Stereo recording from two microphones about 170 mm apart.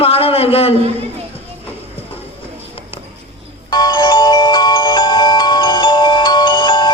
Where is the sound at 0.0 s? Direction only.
35° left (ahead or behind).